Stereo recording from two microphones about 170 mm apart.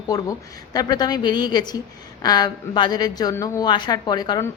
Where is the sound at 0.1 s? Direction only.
20° left (ahead or behind).